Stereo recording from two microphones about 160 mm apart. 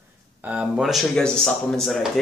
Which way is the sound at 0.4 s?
10° right (ahead or behind).